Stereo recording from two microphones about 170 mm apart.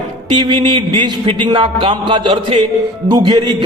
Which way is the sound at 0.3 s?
25° right (ahead or behind).